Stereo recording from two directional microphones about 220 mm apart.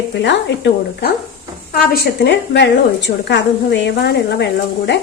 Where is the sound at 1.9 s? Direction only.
45° left (ahead or behind).